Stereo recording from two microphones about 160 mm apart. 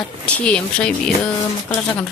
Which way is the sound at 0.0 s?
10° left (ahead or behind).